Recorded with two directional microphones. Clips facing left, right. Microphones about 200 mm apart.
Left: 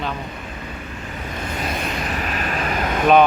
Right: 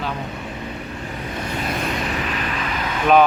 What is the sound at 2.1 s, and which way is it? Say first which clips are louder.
Vehicle: even; 45° left (ahead or behind).